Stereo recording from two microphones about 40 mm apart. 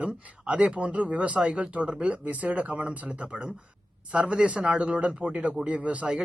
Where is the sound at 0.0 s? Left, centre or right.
Right.